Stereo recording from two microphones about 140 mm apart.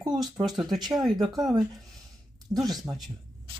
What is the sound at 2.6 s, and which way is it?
Speech, 25° right (ahead or behind).